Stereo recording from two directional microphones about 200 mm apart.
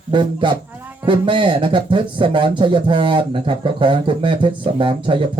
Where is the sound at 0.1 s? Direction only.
25° right (ahead or behind).